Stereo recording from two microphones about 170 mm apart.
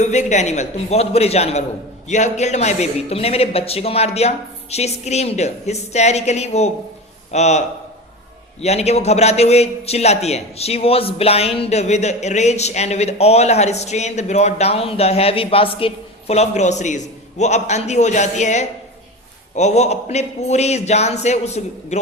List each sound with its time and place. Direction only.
0.0 s a man's voice: 45° left (ahead or behind)
8.6 s a man's voice: 40° left (ahead or behind)